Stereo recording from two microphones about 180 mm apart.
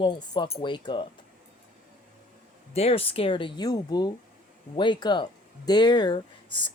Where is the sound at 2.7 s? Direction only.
30° left (ahead or behind).